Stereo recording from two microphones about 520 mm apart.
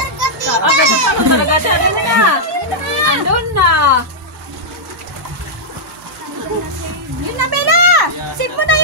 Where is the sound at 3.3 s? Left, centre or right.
Right.